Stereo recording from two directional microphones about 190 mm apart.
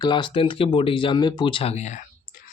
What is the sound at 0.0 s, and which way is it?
A man's voice, 25° left (ahead or behind).